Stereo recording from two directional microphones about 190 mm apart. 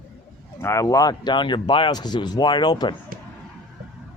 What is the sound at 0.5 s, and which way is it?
Speech, 15° left (ahead or behind).